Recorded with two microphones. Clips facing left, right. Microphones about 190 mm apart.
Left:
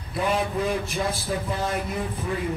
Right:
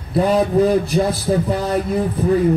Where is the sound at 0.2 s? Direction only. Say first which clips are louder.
Right 10 dB; 40° right (ahead or behind).